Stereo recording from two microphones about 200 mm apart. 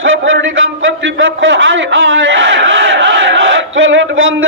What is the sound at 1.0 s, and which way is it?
Battle cry, 70° right (ahead or behind).